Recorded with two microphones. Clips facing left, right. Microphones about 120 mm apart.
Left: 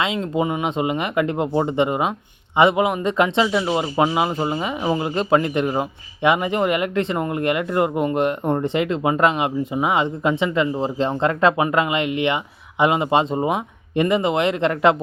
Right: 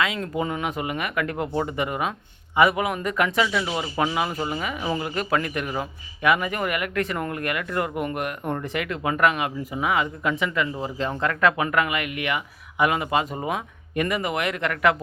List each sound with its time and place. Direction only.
0.0 s speech: 25° left (ahead or behind)